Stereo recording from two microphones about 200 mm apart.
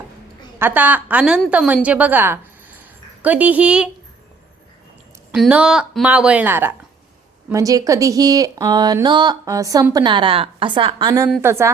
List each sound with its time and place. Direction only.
0.6 s speech: 10° right (ahead or behind)
5.3 s a woman's voice: 5° right (ahead or behind)